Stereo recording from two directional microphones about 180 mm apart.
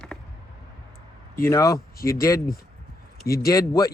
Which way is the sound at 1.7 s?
55° left (ahead or behind).